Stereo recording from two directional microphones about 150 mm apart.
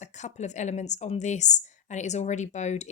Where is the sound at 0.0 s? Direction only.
50° left (ahead or behind).